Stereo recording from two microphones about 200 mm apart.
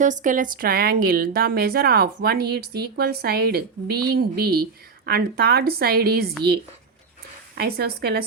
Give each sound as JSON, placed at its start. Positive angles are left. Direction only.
{"t": 0.0, "sound": "a woman's voice", "side_deg": -40}
{"t": 7.5, "sound": "a woman's voice", "side_deg": -50}